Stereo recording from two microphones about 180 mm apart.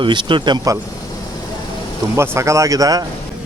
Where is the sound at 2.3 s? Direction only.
15° right (ahead or behind).